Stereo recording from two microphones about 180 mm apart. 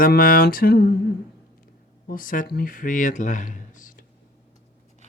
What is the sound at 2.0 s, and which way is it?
Speech, 50° left (ahead or behind).